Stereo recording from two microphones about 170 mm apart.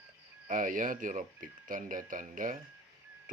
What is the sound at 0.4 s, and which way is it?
Speech, 50° right (ahead or behind).